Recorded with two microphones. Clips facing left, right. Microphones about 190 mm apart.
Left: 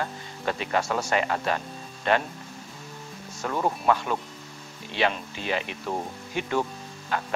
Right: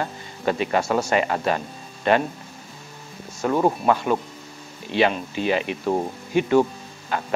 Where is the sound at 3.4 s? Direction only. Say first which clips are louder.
Right 5 dB; 30° right (ahead or behind).